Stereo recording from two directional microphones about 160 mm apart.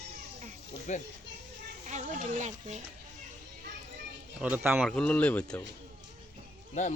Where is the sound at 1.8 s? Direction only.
50° right (ahead or behind).